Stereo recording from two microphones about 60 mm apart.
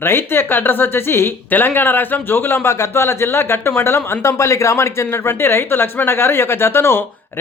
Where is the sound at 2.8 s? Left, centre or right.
Left.